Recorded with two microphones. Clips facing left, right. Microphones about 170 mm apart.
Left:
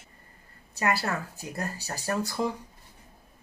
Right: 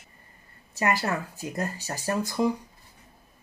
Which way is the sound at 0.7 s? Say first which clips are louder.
Right 2 dB; 20° right (ahead or behind).